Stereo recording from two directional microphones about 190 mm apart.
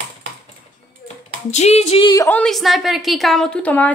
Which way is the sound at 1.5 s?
35° left (ahead or behind).